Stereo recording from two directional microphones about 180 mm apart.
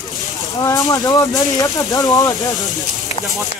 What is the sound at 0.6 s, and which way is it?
Speech, 20° left (ahead or behind).